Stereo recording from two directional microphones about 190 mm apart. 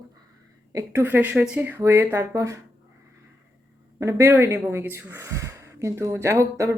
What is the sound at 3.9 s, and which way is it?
Speech, 15° right (ahead or behind).